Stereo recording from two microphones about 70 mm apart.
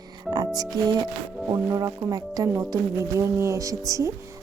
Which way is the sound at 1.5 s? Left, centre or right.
Right.